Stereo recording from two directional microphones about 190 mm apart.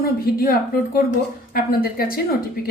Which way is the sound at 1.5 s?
50° left (ahead or behind).